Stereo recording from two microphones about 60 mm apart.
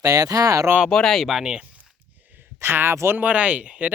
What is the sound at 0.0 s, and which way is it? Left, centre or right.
Speech, right.